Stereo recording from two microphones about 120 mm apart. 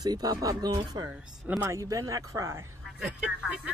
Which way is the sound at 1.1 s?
15° right (ahead or behind).